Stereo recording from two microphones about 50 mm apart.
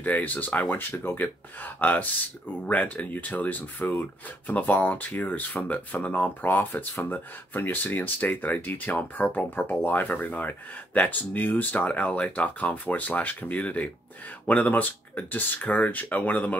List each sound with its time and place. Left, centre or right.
0.0 s speech: left